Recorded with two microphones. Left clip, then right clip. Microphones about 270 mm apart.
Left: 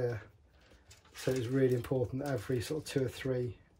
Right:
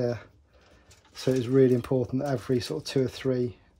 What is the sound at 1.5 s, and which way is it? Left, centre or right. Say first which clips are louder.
Speech: right 10 dB; right.